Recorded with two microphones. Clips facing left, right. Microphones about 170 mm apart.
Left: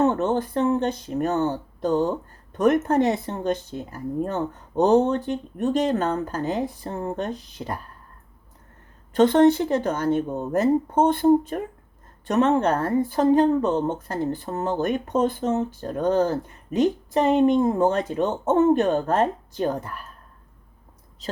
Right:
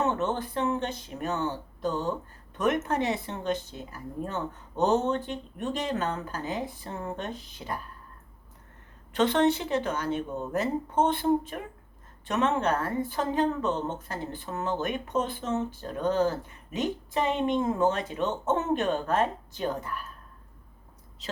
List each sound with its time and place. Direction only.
0.0 s speech: 45° left (ahead or behind)
6.8 s a woman's voice: 35° left (ahead or behind)
9.1 s a woman's voice: 45° left (ahead or behind)